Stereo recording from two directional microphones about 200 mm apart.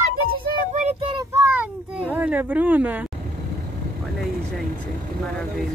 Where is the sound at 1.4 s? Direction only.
10° right (ahead or behind).